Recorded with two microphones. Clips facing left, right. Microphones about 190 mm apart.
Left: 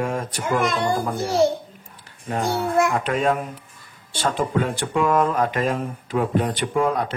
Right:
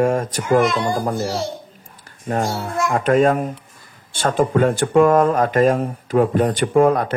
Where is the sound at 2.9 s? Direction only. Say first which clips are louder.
Right 6 dB; 45° right (ahead or behind).